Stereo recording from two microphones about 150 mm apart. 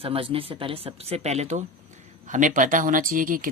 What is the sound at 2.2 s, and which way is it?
Speech, 60° right (ahead or behind).